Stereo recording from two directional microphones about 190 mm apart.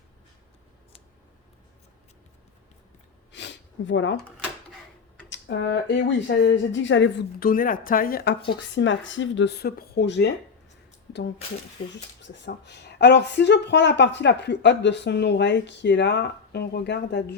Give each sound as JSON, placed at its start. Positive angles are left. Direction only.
{"t": 3.3, "sound": "a sound", "side_deg": 75}
{"t": 5.3, "sound": "a woman's voice", "side_deg": 70}
{"t": 8.4, "sound": "a woman's voice", "side_deg": 70}
{"t": 11.8, "sound": "speech", "side_deg": 25}
{"t": 12.2, "sound": "a woman's voice", "side_deg": 65}